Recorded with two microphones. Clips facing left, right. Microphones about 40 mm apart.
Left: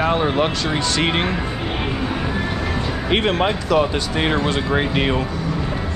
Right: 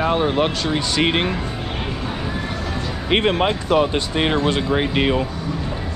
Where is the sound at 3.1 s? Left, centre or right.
Right.